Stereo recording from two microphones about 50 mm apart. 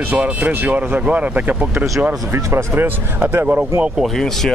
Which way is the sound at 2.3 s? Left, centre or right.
Right.